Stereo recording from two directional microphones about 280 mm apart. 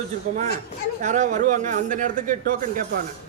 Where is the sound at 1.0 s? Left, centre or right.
Right.